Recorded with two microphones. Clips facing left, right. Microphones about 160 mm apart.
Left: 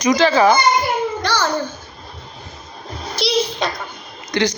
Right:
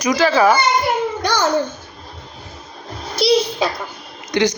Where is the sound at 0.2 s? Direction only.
5° right (ahead or behind).